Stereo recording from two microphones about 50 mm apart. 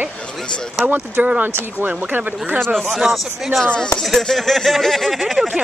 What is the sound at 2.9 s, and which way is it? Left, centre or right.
Speech, centre.